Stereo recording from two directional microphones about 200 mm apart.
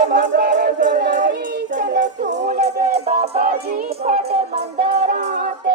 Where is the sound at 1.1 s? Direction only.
40° right (ahead or behind).